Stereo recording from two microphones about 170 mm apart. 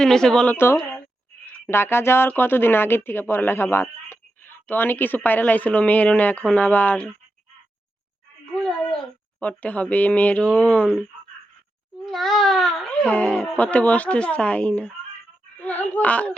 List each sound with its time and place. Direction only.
0.0 s a woman's voice: 5° left (ahead or behind)
8.5 s a sound: centre (ahead or behind)
9.4 s speech: 10° left (ahead or behind)
12.0 s speech: centre (ahead or behind)